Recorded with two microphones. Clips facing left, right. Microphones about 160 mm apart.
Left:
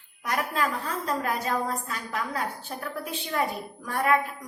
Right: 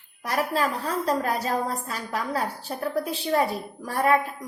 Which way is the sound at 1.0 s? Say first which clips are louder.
Right 3 dB; 35° right (ahead or behind).